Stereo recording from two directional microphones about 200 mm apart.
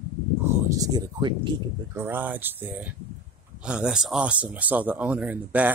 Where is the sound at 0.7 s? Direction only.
20° right (ahead or behind).